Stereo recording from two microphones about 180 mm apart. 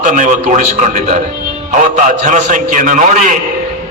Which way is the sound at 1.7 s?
45° right (ahead or behind).